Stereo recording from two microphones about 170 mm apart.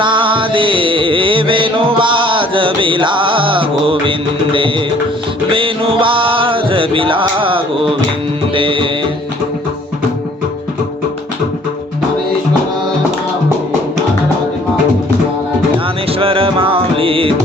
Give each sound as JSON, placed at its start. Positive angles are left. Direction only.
{"t": 0.0, "sound": "music", "side_deg": -30}
{"t": 5.5, "sound": "music", "side_deg": -30}
{"t": 16.1, "sound": "music", "side_deg": -35}